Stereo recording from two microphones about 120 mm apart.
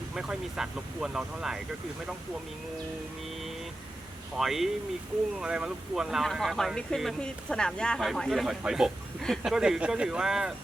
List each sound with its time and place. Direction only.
0.1 s speech: 5° right (ahead or behind)
4.4 s speech: centre (ahead or behind)